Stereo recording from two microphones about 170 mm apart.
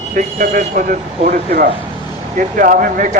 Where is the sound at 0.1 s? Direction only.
55° right (ahead or behind).